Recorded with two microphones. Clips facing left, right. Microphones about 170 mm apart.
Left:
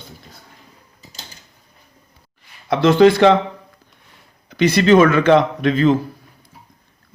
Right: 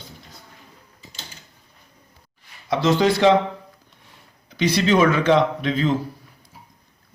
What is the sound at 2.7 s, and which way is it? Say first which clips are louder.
Speech: left 7 dB; 55° left (ahead or behind).